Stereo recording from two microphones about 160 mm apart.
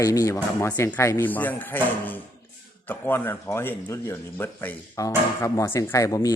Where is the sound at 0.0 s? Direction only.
20° left (ahead or behind).